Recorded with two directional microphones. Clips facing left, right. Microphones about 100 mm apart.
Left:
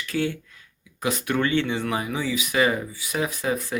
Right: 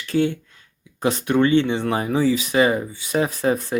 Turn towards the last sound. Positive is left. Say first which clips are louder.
# right 5 dB
turn(degrees=-30)  # may be behind; listen again after turning